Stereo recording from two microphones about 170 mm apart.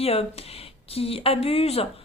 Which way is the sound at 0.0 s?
35° left (ahead or behind).